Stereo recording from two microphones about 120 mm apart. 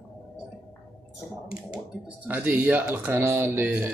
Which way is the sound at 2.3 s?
15° right (ahead or behind).